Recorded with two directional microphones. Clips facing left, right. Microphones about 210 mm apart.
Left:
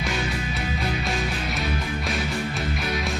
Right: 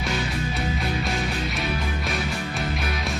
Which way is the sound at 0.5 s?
Centre (ahead or behind).